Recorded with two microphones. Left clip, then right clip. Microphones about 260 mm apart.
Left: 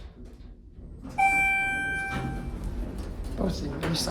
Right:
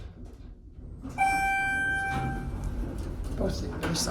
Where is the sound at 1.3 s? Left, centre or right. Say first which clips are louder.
Left 2 dB; centre.